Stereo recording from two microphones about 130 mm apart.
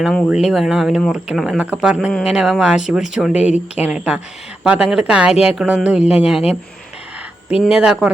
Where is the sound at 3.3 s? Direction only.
60° left (ahead or behind).